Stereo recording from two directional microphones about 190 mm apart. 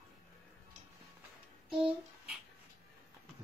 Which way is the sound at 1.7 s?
Centre (ahead or behind).